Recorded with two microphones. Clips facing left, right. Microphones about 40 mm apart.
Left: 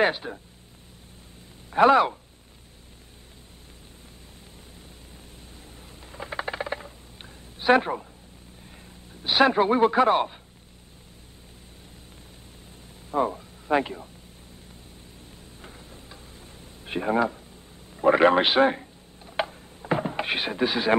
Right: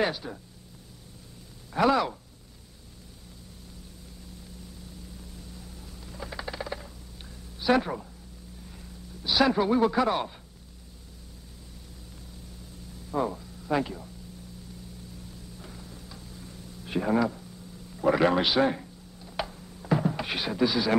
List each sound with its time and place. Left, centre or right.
0.0 s speech: left
1.7 s speech: left
4.6 s a sound: left
8.7 s a man's voice: left
13.1 s speech: left
15.2 s tick-tock: left
19.2 s a sound: left